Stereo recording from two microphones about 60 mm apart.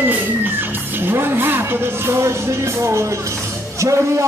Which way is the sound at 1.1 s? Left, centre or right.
Right.